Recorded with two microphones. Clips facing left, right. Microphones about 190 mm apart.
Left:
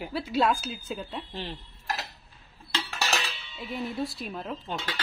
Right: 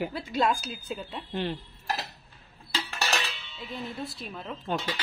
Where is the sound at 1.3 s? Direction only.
55° right (ahead or behind).